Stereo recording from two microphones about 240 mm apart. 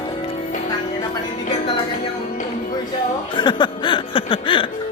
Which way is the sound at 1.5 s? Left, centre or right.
Left.